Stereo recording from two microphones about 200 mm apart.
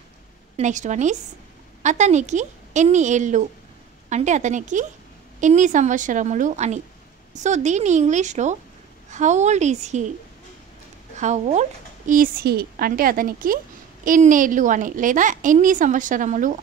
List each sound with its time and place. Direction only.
0.6 s a woman's voice: 35° right (ahead or behind)
11.1 s a woman's voice: 35° right (ahead or behind)